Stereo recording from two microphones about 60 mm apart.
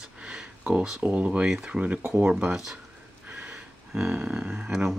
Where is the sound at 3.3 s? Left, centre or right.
Right.